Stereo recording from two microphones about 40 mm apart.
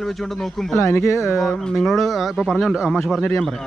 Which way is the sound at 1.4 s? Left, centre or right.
Centre.